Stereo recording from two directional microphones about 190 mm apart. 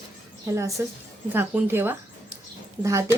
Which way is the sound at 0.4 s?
15° right (ahead or behind).